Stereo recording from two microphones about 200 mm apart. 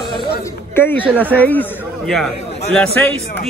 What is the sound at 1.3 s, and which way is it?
Speech, 10° left (ahead or behind).